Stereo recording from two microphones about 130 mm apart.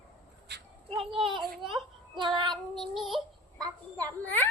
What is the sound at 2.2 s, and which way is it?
Child singing, 35° right (ahead or behind).